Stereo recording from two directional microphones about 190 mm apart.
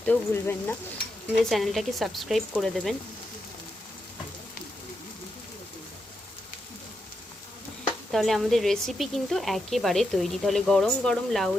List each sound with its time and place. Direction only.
0.0 s speech: 5° left (ahead or behind)
8.1 s speech: centre (ahead or behind)